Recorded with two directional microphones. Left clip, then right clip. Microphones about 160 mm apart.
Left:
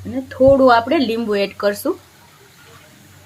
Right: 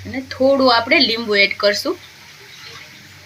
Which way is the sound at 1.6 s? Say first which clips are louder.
Right 3 dB; 65° left (ahead or behind).